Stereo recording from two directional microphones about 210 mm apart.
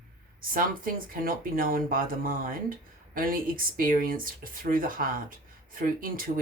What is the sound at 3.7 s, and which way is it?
Speech, 40° right (ahead or behind).